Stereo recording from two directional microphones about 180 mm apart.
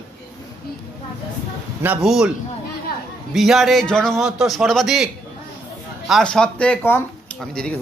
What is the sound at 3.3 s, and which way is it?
A man's voice, centre (ahead or behind).